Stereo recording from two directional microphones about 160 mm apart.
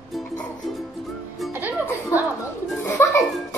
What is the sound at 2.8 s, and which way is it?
Speech, 15° left (ahead or behind).